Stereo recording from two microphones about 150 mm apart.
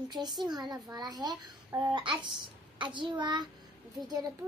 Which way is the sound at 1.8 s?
35° right (ahead or behind).